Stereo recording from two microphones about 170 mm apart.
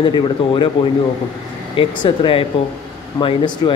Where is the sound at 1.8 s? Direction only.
30° left (ahead or behind).